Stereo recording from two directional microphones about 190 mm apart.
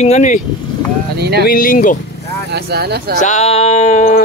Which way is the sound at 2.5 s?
60° right (ahead or behind).